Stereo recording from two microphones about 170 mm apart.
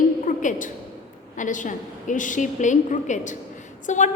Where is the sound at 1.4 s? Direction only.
50° left (ahead or behind).